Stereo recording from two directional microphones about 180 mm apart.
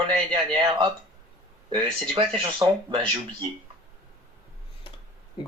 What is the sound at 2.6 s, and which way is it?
Speech, 25° right (ahead or behind).